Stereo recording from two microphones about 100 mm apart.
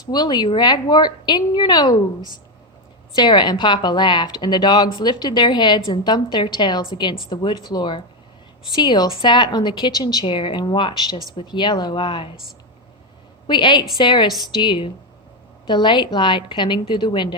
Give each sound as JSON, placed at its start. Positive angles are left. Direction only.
{"t": 0.0, "sound": "a woman's voice", "side_deg": 45}
{"t": 3.2, "sound": "a woman's voice", "side_deg": 50}
{"t": 13.5, "sound": "a woman's voice", "side_deg": 50}